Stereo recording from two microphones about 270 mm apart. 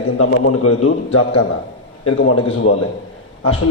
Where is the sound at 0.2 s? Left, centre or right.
Left.